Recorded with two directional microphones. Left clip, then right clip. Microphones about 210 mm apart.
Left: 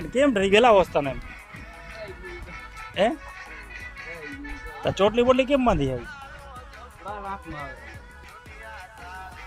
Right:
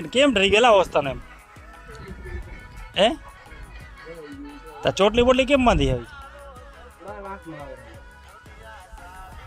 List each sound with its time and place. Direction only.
0.1 s speech: 5° right (ahead or behind)
2.9 s speech: 10° right (ahead or behind)
4.3 s music: 55° left (ahead or behind)
4.8 s speech: 15° right (ahead or behind)